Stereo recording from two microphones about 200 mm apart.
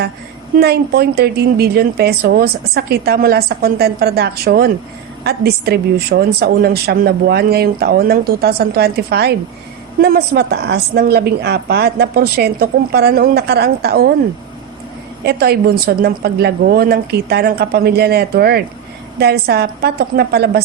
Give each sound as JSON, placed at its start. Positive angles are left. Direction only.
{"t": 0.6, "sound": "speech", "side_deg": -55}
{"t": 15.2, "sound": "speech", "side_deg": -55}